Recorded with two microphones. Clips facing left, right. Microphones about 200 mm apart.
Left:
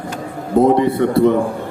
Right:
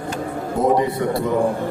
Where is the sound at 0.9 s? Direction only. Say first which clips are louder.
Left 6 dB; 60° left (ahead or behind).